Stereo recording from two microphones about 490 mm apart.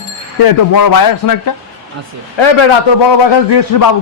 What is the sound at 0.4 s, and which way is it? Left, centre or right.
A man's voice, left.